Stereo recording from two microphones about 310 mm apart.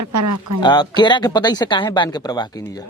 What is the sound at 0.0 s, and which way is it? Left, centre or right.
Speech, right.